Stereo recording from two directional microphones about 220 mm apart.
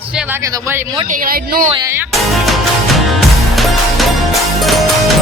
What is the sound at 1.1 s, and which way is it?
Speech, 40° right (ahead or behind).